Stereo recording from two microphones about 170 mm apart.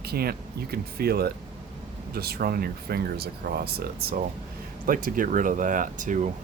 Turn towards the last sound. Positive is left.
turn(degrees=-50)  # may be behind; listen again after turning